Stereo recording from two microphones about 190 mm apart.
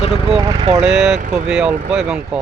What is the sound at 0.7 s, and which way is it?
Speech, 5° right (ahead or behind).